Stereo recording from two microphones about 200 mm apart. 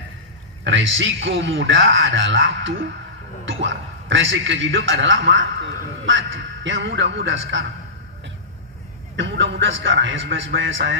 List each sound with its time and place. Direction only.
0.7 s a man's voice: 70° right (ahead or behind)
9.1 s a man's voice: 65° right (ahead or behind)